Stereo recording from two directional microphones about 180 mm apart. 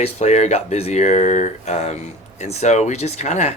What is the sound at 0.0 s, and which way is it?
Speech, 40° left (ahead or behind).